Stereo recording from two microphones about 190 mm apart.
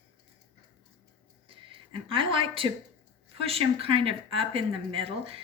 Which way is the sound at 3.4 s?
30° right (ahead or behind).